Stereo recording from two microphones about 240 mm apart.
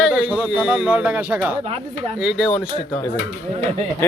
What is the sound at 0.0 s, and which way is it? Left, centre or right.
A man's voice, centre.